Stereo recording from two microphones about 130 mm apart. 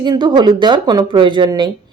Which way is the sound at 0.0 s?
35° right (ahead or behind).